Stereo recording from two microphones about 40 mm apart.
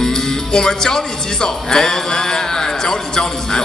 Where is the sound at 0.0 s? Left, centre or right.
Centre.